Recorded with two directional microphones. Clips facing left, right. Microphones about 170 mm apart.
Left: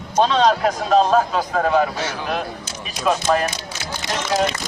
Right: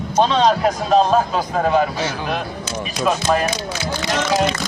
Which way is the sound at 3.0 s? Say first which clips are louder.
Even; centre (ahead or behind).